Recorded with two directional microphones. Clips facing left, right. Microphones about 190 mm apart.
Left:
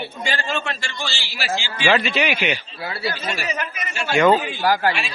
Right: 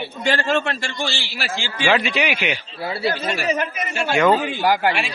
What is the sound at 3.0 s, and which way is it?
Speech, 50° right (ahead or behind).